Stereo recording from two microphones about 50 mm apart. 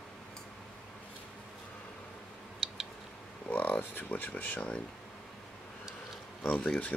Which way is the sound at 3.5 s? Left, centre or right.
Left.